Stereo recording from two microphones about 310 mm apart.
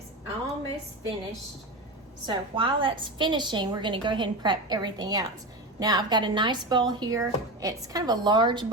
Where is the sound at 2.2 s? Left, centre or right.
Centre.